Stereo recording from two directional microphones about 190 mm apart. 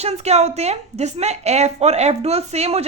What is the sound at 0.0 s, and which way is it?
A woman's voice, 35° right (ahead or behind).